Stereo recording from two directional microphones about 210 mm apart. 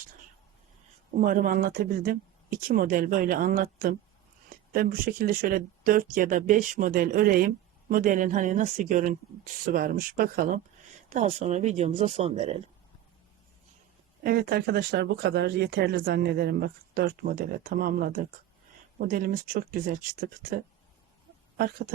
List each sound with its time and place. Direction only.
1.1 s speech: 40° right (ahead or behind)
14.3 s speech: 45° right (ahead or behind)